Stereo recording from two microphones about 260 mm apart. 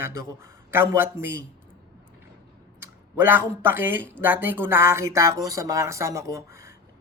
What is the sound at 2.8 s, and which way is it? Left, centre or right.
A man's voice, centre.